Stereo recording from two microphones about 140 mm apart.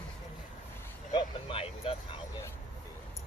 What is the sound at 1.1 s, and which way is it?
Vehicle, 40° left (ahead or behind).